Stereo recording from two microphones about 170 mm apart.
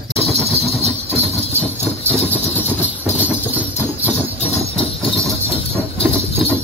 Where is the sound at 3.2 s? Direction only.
10° right (ahead or behind).